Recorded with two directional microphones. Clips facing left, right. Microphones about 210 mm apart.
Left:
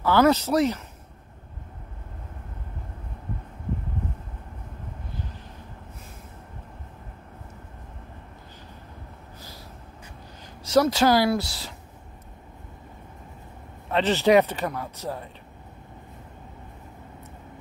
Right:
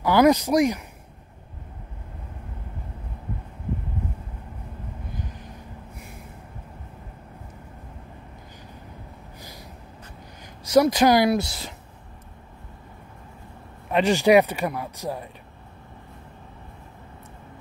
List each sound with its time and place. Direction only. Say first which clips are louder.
0.0 s a man's voice: right 2 dB; 15° right (ahead or behind)
10.6 s a man's voice: right 2 dB; 15° right (ahead or behind)
13.8 s a man's voice: right 2 dB; 15° right (ahead or behind)